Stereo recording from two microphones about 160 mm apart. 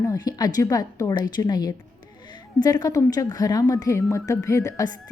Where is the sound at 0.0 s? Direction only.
25° left (ahead or behind).